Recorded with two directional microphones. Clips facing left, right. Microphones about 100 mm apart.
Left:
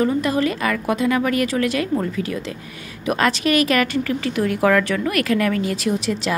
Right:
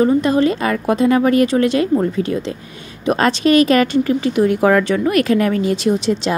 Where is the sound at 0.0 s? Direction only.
30° right (ahead or behind).